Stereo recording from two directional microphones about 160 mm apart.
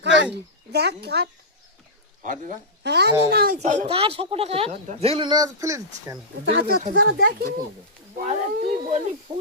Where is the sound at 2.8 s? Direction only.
90° right; by 3.6 s 75° right (ahead or behind).